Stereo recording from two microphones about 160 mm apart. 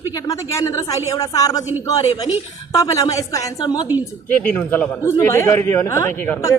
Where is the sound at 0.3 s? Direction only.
20° left (ahead or behind).